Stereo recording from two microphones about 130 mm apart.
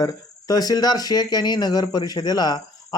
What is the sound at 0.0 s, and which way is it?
Speech, 30° left (ahead or behind).